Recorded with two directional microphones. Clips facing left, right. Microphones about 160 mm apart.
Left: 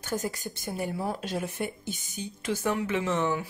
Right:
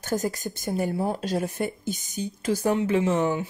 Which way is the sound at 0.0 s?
40° right (ahead or behind).